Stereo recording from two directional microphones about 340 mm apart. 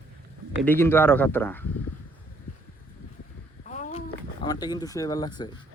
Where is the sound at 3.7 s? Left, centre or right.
Left.